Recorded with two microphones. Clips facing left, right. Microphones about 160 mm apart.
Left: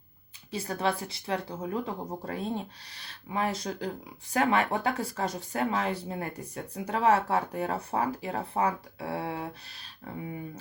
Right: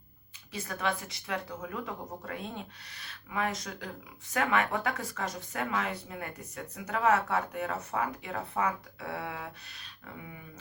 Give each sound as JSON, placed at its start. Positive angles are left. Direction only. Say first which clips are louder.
{"t": 0.5, "sound": "speech", "louder": "left 4 dB", "side_deg": 30}